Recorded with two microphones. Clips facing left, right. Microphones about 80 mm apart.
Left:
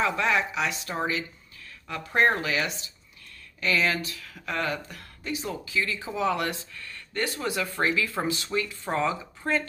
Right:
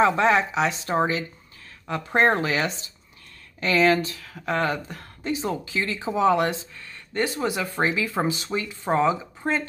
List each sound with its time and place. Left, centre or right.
0.0 s speech: right